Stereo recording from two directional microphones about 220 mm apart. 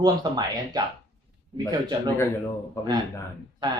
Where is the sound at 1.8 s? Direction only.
20° right (ahead or behind).